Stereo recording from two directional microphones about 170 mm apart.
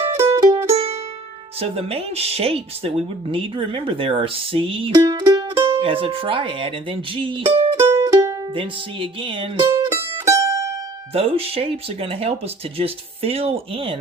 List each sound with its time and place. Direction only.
0.2 s music: 20° right (ahead or behind)
1.5 s speech: 35° right (ahead or behind)
5.0 s music: 20° right (ahead or behind)
5.8 s speech: 35° right (ahead or behind)
8.0 s music: 20° right (ahead or behind)
9.6 s music: 15° right (ahead or behind)
11.1 s speech: 35° right (ahead or behind)